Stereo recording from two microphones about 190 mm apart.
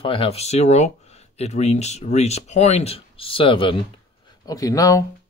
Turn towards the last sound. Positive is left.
turn(degrees=15)  # may be behind; listen again after turning